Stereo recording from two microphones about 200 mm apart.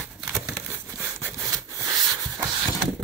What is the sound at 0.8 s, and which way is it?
Rub, 10° right (ahead or behind).